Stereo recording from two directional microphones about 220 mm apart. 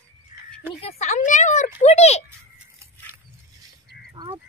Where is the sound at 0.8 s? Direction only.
35° left (ahead or behind).